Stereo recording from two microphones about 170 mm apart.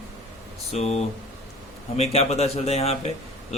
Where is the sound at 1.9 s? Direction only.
40° left (ahead or behind).